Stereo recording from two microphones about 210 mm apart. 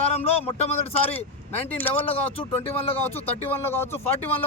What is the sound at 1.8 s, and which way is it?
Speech, 10° left (ahead or behind).